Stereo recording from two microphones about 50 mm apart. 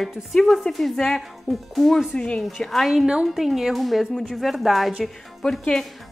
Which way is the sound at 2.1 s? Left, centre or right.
Left.